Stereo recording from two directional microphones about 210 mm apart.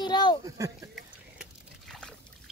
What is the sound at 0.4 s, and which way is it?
Speech, 15° right (ahead or behind).